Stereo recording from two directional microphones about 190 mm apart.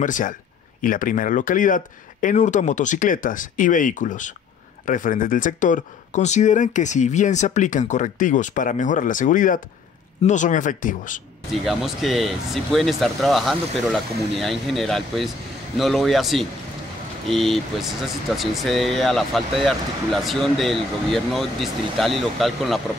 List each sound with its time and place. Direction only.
0.0 s speech: 45° left (ahead or behind)
11.6 s speech: centre (ahead or behind)